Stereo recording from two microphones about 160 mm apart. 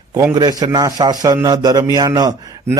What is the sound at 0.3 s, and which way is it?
A man's voice, 25° right (ahead or behind).